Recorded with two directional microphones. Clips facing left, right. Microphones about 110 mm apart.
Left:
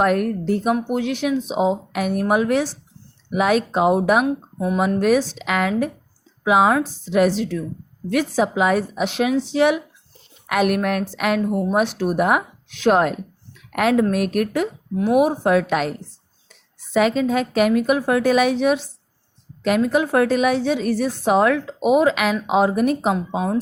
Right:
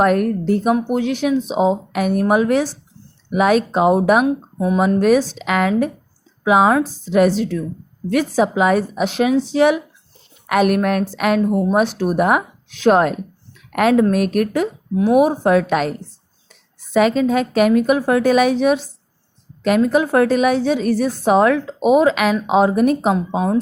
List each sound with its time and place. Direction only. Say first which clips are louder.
0.0 s a woman's voice: right 3 dB; 45° right (ahead or behind)